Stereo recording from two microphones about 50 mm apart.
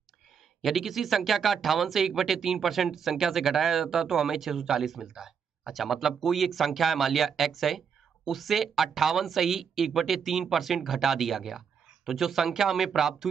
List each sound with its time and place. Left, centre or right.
0.6 s speech: centre